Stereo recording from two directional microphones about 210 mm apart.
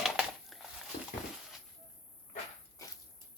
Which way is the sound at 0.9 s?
45° left (ahead or behind).